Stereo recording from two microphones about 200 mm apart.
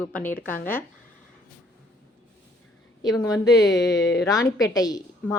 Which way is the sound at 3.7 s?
65° left (ahead or behind).